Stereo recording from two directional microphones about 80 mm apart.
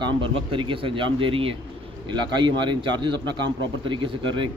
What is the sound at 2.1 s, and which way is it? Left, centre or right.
A man's voice, right.